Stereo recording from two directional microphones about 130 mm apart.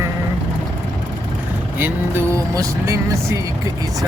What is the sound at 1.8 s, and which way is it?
Speech, 20° right (ahead or behind).